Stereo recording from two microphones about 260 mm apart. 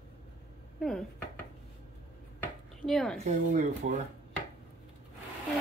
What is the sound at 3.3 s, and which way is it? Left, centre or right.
Speech, right.